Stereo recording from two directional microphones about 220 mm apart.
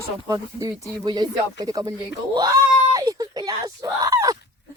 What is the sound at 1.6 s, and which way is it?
Baby cry, 15° right (ahead or behind).